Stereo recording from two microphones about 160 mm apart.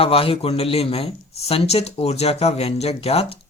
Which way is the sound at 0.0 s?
35° left (ahead or behind).